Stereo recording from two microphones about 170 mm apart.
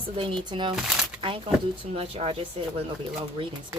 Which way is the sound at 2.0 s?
35° right (ahead or behind).